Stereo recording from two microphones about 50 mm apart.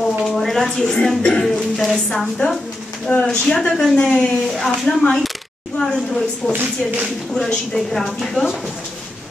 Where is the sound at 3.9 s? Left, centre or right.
Left.